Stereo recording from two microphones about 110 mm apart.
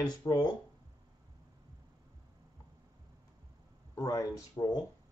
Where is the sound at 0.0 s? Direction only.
35° left (ahead or behind).